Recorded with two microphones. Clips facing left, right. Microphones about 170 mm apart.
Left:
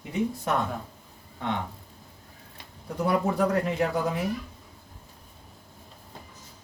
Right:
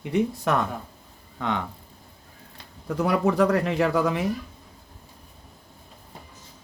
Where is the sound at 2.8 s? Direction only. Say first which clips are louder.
Right 3 dB; 90° right.